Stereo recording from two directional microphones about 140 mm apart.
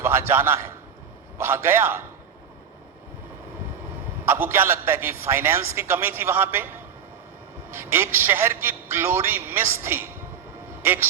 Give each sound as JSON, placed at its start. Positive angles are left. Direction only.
{"t": 0.0, "sound": "a man's voice", "side_deg": -15}
{"t": 4.3, "sound": "a man's voice", "side_deg": -15}
{"t": 7.7, "sound": "a man's voice", "side_deg": -15}